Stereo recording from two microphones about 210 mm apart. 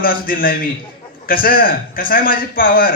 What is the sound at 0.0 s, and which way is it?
A man's voice, 45° left (ahead or behind).